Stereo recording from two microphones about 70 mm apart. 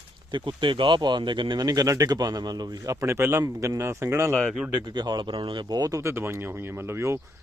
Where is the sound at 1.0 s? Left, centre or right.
Right.